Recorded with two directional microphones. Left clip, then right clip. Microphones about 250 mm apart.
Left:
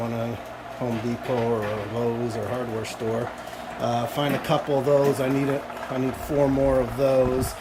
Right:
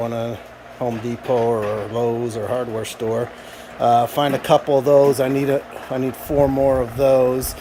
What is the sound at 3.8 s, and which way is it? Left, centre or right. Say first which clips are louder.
Speech: right 9 dB; centre.